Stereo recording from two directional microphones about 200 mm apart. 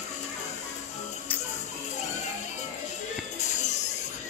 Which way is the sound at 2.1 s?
35° left (ahead or behind).